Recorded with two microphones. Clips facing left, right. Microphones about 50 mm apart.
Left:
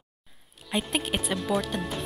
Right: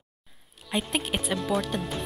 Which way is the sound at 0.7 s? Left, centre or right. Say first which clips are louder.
Even; centre.